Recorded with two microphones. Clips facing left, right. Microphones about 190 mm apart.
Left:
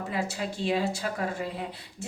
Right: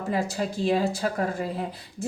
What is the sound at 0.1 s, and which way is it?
Speech, 40° right (ahead or behind).